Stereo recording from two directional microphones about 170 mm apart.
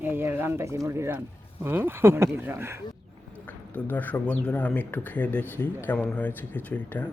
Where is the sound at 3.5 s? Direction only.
10° left (ahead or behind).